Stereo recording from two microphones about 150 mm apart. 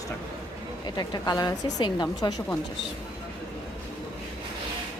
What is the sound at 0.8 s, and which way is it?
A woman's voice, 30° left (ahead or behind).